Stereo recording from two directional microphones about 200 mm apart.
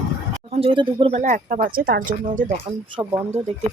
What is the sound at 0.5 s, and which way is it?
Speech, 25° right (ahead or behind).